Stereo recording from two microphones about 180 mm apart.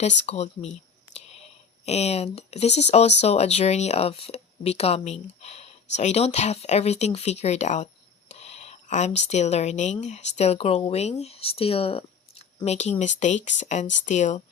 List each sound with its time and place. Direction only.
0.3 s whispering: 40° left (ahead or behind)
1.8 s speech: 35° left (ahead or behind)